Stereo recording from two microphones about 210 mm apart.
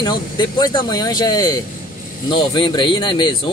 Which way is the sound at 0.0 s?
20° left (ahead or behind).